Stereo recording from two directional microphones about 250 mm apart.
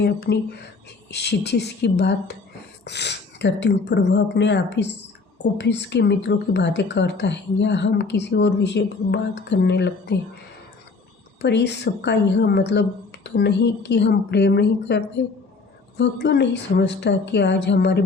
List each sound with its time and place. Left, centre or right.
0.3 s speech: left
11.3 s speech: left